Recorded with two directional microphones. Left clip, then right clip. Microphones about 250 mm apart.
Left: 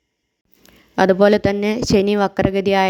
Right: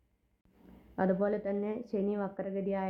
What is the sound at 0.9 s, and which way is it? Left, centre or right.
A woman's voice, left.